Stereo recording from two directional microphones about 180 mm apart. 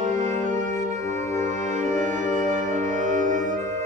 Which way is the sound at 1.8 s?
45° right (ahead or behind).